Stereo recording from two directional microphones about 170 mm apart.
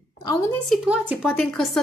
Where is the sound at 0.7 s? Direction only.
5° right (ahead or behind).